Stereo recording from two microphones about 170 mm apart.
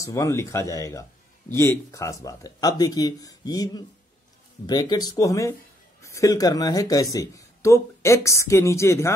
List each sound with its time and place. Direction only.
0.0 s speech: 20° left (ahead or behind)